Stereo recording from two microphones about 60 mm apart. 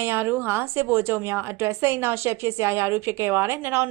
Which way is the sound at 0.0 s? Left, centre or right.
Right.